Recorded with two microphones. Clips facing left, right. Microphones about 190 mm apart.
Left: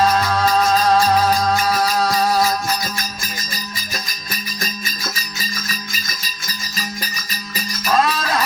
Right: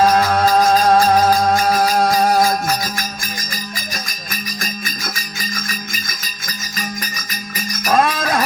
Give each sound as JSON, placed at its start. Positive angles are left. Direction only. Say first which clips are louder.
{"t": 0.5, "sound": "music", "louder": "right 2 dB", "side_deg": -50}
{"t": 7.7, "sound": "music", "louder": "right 2 dB", "side_deg": -50}